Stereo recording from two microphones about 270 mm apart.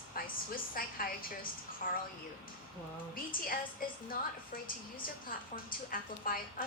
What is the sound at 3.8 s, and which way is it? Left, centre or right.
Speech, left.